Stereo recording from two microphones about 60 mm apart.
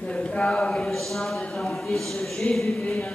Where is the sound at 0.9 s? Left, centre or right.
Centre.